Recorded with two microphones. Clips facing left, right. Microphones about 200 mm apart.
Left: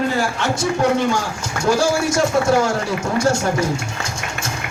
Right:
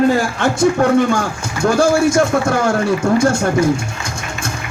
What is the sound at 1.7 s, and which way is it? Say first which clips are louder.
Speech: right 5 dB; 55° right (ahead or behind).